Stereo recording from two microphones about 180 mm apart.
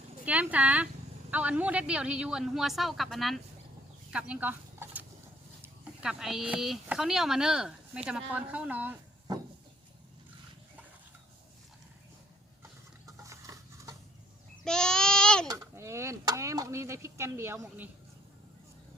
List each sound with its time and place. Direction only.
0.3 s speech: 10° right (ahead or behind)
4.1 s a sound: 5° right (ahead or behind)
5.6 s speech: 5° right (ahead or behind)
13.1 s a sound: 15° right (ahead or behind)
14.6 s babbling: 5° left (ahead or behind)
15.4 s speech: 15° right (ahead or behind)